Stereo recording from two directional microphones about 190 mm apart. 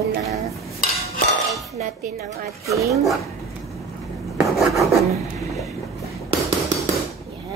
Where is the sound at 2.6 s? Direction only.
15° right (ahead or behind).